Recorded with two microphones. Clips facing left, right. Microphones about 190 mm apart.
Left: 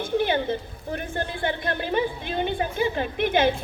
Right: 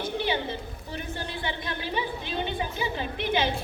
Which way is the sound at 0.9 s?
55° left (ahead or behind).